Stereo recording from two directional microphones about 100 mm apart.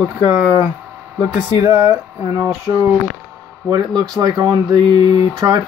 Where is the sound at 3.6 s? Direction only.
40° right (ahead or behind).